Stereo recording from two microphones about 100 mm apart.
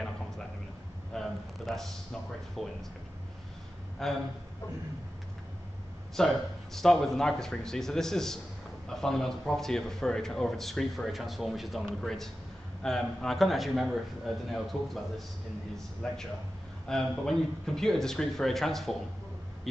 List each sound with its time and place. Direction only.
1.1 s a sound: 5° left (ahead or behind)
2.6 s a man's voice: 5° left (ahead or behind)
4.0 s a man's voice: centre (ahead or behind)
6.1 s a man's voice: 5° left (ahead or behind)